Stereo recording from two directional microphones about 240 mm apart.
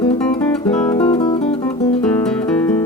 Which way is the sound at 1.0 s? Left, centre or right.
Left.